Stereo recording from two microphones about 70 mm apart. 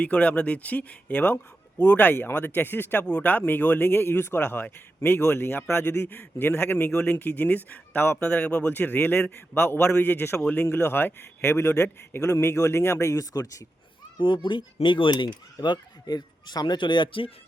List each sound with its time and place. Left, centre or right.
0.0 s a man's voice: centre
3.1 s a man's voice: left
8.3 s speech: centre
9.3 s a man's voice: left
14.2 s speech: left